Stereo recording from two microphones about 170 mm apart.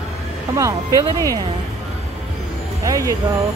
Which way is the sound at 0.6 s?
20° right (ahead or behind).